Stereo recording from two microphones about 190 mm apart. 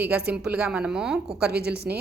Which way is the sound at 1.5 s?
60° right (ahead or behind).